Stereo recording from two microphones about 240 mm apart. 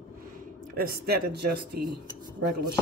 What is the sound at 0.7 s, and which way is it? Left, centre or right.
Speech, right.